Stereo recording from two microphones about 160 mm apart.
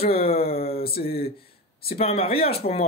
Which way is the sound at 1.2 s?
70° left (ahead or behind).